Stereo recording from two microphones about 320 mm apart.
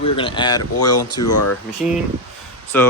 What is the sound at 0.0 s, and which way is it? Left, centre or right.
Speech, centre.